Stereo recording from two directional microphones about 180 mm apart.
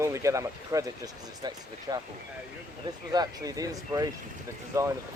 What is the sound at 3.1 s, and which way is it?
Speech, 20° right (ahead or behind).